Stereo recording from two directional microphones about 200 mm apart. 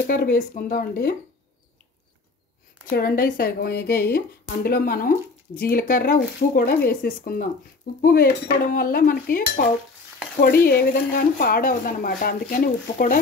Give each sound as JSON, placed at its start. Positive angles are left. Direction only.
{"t": 0.0, "sound": "a woman's voice", "side_deg": 45}
{"t": 2.9, "sound": "a woman's voice", "side_deg": 50}